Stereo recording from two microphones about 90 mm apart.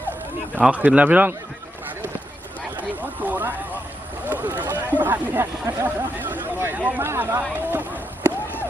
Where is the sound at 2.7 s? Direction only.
20° right (ahead or behind).